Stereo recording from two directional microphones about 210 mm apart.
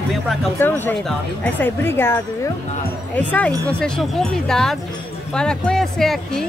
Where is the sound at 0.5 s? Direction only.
10° left (ahead or behind).